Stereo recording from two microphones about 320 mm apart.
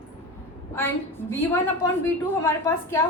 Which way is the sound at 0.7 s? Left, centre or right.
Centre.